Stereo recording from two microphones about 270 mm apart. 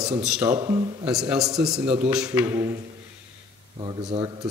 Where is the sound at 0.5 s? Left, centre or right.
Centre.